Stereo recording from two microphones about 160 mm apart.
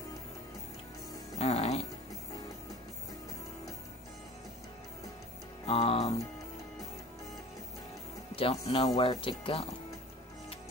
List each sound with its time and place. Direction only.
1.4 s music: 40° left (ahead or behind)
5.7 s music: 40° left (ahead or behind)
8.4 s speech: 35° left (ahead or behind)
8.8 s speech: 25° left (ahead or behind)